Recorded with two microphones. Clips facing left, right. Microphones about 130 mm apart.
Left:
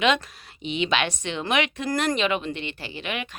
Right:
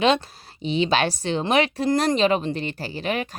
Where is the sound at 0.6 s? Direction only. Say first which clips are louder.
Right 4 dB; 35° right (ahead or behind).